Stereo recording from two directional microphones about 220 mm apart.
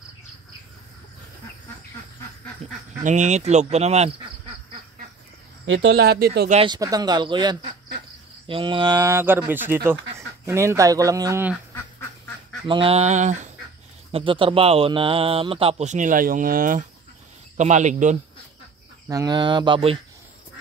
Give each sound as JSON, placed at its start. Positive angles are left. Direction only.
{"t": 2.6, "sound": "speech", "side_deg": -35}
{"t": 5.7, "sound": "speech", "side_deg": -50}
{"t": 6.5, "sound": "speech", "side_deg": -20}
{"t": 12.6, "sound": "speech", "side_deg": -25}
{"t": 19.0, "sound": "speech", "side_deg": -15}